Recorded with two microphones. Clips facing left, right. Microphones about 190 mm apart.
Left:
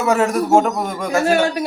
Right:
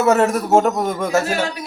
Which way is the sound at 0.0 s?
5° right (ahead or behind).